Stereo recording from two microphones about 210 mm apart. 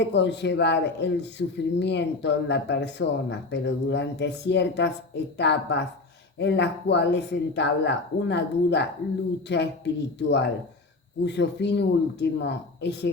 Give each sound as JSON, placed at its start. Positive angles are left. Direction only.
{"t": 0.0, "sound": "speech", "side_deg": 55}